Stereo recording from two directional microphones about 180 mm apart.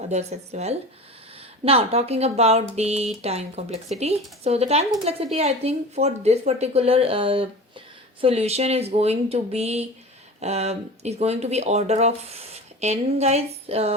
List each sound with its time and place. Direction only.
0.1 s speech: 40° right (ahead or behind)